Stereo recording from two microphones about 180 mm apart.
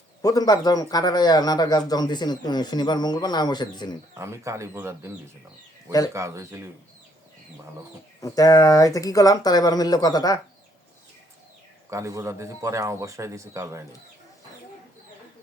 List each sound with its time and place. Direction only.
0.2 s a man's voice: 20° left (ahead or behind)
4.2 s speech: 15° right (ahead or behind)
6.1 s speech: 15° right (ahead or behind)
8.2 s a man's voice: 20° left (ahead or behind)
11.9 s speech: 15° right (ahead or behind)